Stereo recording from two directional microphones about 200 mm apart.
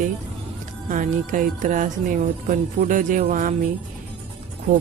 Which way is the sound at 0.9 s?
40° right (ahead or behind).